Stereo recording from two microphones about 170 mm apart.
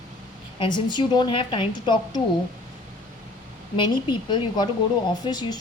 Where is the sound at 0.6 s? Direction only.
25° left (ahead or behind).